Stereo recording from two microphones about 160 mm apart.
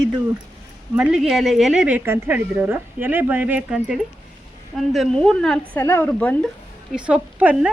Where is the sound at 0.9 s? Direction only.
5° right (ahead or behind).